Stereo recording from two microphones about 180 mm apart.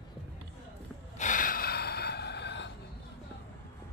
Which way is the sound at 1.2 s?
45° left (ahead or behind).